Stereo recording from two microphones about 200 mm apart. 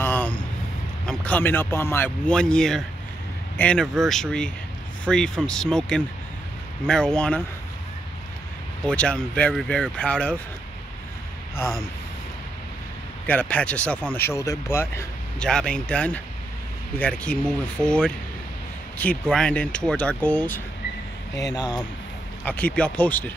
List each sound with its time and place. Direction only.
0.0 s a sound: 10° left (ahead or behind)
1.0 s speech: 5° left (ahead or behind)
8.8 s speech: 5° left (ahead or behind)
13.3 s speech: 5° left (ahead or behind)
21.5 s speech: 20° left (ahead or behind)
22.4 s speech: 10° left (ahead or behind)